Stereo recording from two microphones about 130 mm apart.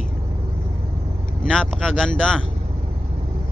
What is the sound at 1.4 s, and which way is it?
Speech, 5° left (ahead or behind).